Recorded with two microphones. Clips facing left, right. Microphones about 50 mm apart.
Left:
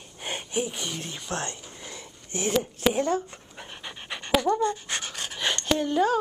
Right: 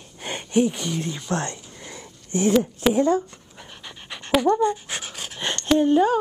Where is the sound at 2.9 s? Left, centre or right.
Left.